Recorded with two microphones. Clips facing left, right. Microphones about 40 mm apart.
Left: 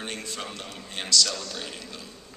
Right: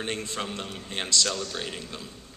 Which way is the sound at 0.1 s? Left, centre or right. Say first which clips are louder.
Right 3 dB; right.